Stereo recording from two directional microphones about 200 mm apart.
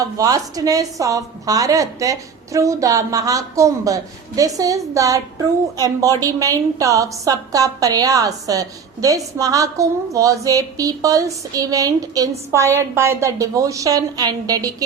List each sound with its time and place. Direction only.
0.0 s a woman's voice: 15° right (ahead or behind)